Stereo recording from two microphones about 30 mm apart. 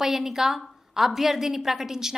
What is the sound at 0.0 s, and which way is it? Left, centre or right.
A woman's voice, centre.